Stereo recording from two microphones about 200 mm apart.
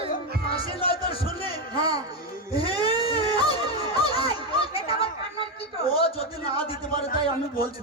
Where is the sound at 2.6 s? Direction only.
30° left (ahead or behind).